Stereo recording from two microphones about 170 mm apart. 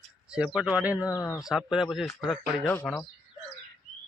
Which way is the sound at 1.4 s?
5° right (ahead or behind).